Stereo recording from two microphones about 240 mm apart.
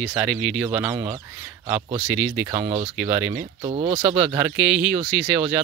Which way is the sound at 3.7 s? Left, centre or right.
Right.